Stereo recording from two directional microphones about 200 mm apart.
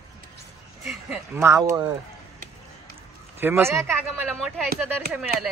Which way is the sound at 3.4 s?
10° right (ahead or behind).